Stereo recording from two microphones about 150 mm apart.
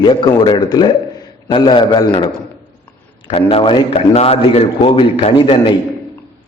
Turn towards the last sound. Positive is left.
turn(degrees=35)  # may be behind; listen again after turning